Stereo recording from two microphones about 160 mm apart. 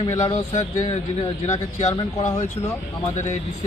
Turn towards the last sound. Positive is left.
turn(degrees=45)  # may be behind; listen again after turning